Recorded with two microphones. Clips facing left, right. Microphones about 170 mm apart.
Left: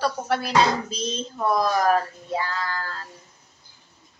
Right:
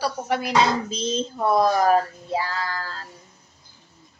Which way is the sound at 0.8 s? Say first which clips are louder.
Right 4 dB; 25° right (ahead or behind).